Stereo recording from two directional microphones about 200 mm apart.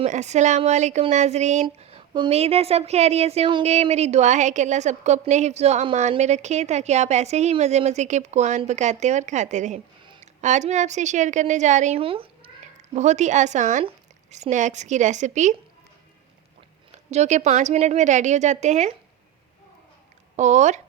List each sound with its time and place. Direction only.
0.0 s a woman's voice: 35° right (ahead or behind)
17.1 s speech: 35° right (ahead or behind)
20.3 s speech: 35° right (ahead or behind)